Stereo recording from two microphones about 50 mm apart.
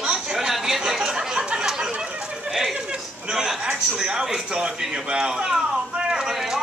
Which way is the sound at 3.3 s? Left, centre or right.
Centre.